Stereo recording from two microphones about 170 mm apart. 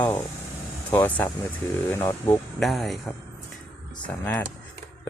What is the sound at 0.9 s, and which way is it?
Speech, 10° left (ahead or behind).